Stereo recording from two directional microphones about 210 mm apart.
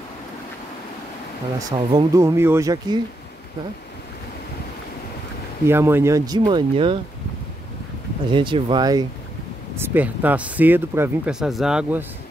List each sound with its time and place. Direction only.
1.6 s speech: 15° right (ahead or behind)
5.7 s speech: 10° right (ahead or behind)
8.3 s speech: 25° right (ahead or behind)
9.8 s speech: 10° right (ahead or behind)